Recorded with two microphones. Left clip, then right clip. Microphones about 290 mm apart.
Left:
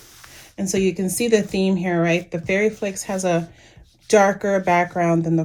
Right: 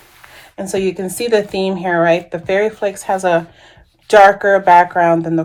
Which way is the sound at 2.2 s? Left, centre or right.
Centre.